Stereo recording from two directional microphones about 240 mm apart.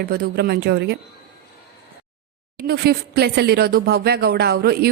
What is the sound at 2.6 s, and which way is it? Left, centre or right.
Speech, right.